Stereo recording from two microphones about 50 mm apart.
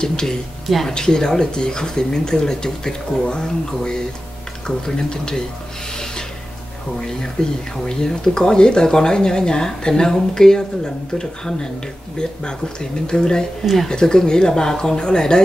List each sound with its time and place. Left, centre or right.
0.0 s speech: centre
0.7 s speech: centre
0.9 s speech: centre
7.4 s speech: centre